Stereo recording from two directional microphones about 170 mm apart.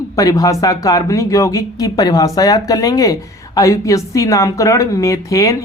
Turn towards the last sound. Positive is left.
turn(degrees=20)  # may be behind; listen again after turning